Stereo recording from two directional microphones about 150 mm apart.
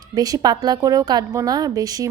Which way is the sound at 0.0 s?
25° right (ahead or behind).